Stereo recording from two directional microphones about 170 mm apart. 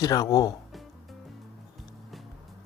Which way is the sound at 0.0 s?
20° left (ahead or behind).